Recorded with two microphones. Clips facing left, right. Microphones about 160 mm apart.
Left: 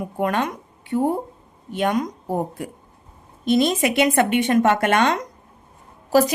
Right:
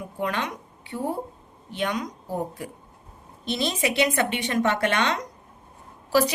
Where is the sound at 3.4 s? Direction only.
45° left (ahead or behind).